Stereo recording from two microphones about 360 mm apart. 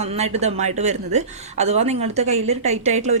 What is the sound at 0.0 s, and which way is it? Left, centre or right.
A woman's voice, centre.